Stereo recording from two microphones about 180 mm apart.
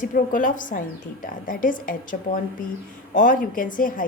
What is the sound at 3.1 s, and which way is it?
Speech, 50° left (ahead or behind).